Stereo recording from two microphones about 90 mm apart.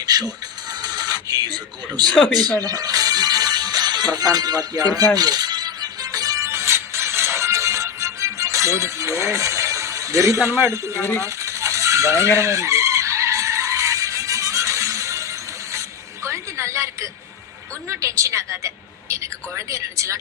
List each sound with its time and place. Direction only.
0.0 s speech: 45° right (ahead or behind)
0.7 s music: 45° right (ahead or behind)
2.1 s speech: 5° left (ahead or behind)
2.6 s music: 45° right (ahead or behind)
11.2 s cutlery: 35° right (ahead or behind)
12.4 s vehicle: 35° right (ahead or behind)
17.8 s a woman's voice: 30° right (ahead or behind)